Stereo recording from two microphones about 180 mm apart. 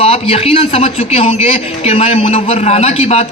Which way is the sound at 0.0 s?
35° left (ahead or behind).